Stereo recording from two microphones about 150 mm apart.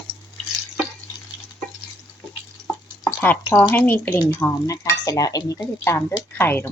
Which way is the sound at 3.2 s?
10° left (ahead or behind).